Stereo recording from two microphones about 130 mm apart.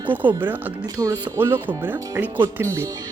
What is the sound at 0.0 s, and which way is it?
Speech, 15° right (ahead or behind).